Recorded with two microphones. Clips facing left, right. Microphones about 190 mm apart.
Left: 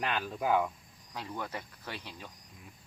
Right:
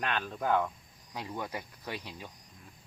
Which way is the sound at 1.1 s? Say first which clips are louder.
Right 1 dB; 15° right (ahead or behind).